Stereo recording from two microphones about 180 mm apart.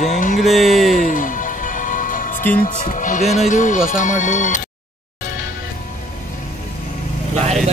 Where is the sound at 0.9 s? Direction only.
45° left (ahead or behind).